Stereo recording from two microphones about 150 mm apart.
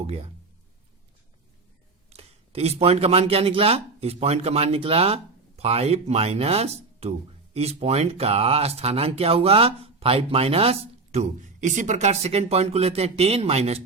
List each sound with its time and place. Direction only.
2.0 s speech: 45° right (ahead or behind)